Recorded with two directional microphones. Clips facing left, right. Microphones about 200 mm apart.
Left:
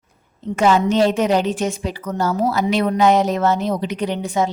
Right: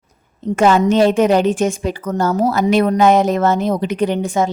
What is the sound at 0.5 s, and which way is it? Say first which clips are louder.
A woman's voice: right 3 dB; 50° right (ahead or behind).